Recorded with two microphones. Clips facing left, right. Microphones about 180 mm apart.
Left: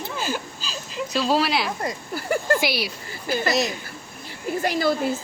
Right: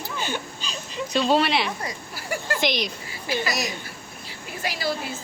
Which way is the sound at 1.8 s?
45° left (ahead or behind).